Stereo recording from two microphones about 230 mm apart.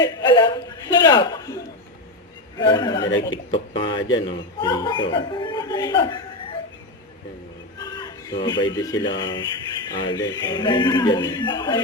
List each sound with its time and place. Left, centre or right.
0.0 s a sound: centre
1.0 s a man's voice: centre
2.6 s a man's voice: centre
3.8 s speech: left
4.4 s a man's voice: centre
7.8 s a man's voice: centre